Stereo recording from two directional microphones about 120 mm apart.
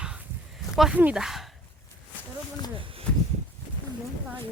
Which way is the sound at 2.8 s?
45° right (ahead or behind).